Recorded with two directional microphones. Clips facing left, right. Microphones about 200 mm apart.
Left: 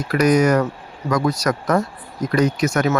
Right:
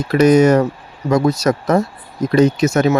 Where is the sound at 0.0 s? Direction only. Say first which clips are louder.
Right 5 dB; 25° right (ahead or behind).